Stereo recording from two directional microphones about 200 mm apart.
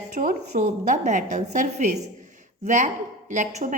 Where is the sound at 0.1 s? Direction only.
40° right (ahead or behind).